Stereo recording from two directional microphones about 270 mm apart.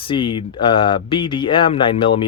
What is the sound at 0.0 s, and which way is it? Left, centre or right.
Speech, centre.